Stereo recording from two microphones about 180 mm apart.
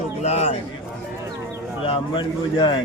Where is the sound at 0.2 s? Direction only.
35° left (ahead or behind).